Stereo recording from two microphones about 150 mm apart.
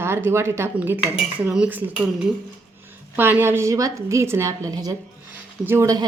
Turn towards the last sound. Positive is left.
turn(degrees=-20)  # may be behind; listen again after turning